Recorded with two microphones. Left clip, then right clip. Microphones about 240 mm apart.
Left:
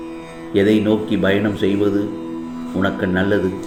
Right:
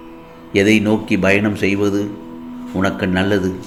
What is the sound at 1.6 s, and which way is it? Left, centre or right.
A man's voice, right.